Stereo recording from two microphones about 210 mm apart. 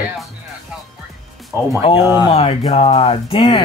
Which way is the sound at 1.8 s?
25° left (ahead or behind).